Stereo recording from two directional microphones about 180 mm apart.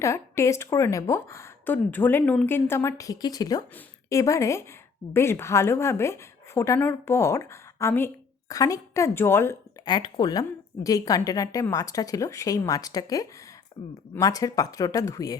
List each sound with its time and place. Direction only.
0.0 s a woman's voice: 15° left (ahead or behind)